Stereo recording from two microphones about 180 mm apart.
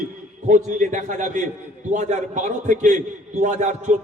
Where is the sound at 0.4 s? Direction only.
45° right (ahead or behind).